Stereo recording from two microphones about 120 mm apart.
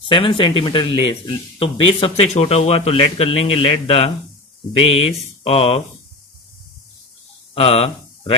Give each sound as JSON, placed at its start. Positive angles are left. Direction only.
{"t": 0.1, "sound": "speech", "side_deg": 45}
{"t": 7.5, "sound": "speech", "side_deg": 55}